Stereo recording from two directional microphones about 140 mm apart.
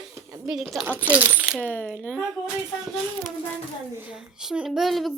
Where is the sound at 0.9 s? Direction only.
15° right (ahead or behind).